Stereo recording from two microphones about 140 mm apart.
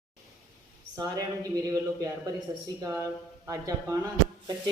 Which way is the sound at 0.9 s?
25° right (ahead or behind).